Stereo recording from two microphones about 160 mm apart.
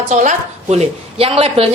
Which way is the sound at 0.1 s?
45° right (ahead or behind).